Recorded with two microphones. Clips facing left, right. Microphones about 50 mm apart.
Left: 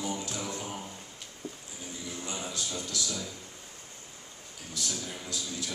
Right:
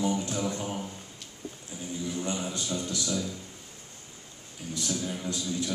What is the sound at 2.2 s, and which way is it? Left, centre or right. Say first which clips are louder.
A man's voice: right 3 dB; right.